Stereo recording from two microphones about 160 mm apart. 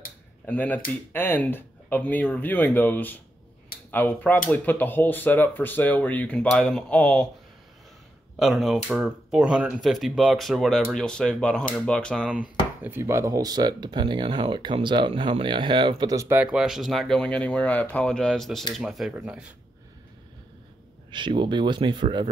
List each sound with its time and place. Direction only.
0.5 s speech: 10° left (ahead or behind)
8.4 s speech: centre (ahead or behind)
12.3 s speech: 10° right (ahead or behind)
21.1 s speech: 30° right (ahead or behind)